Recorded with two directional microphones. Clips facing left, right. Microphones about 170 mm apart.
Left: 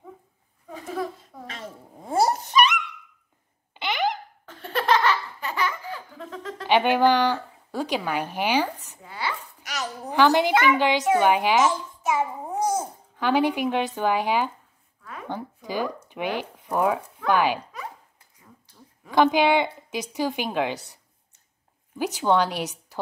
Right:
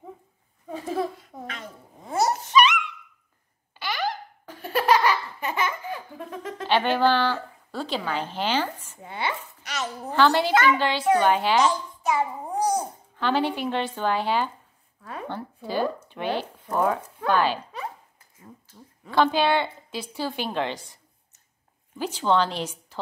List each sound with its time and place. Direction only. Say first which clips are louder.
0.7 s a sound: right 3 dB; 30° right (ahead or behind)
2.1 s a sound: left 2 dB; 30° left (ahead or behind)
3.7 s a sound: left 3 dB; 20° left (ahead or behind)
4.5 s laughter: right 2 dB; 10° right (ahead or behind)
6.7 s a woman's voice: left 2 dB; 15° left (ahead or behind)
9.0 s chopping: right 2 dB; 25° right (ahead or behind)
10.0 s a woman's voice: left 2 dB; 15° left (ahead or behind)
12.6 s babbling: even; 15° right (ahead or behind)
13.1 s a woman's voice: left 3 dB; 10° left (ahead or behind)
18.7 s a woman's voice: left 1 dB; 15° left (ahead or behind)
21.9 s a woman's voice: left 1 dB; 10° left (ahead or behind)